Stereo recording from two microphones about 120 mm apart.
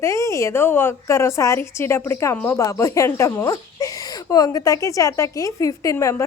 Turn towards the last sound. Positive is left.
turn(degrees=25)  # may be behind; listen again after turning